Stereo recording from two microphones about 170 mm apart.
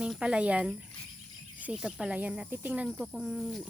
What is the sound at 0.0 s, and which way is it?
Speech, 5° right (ahead or behind).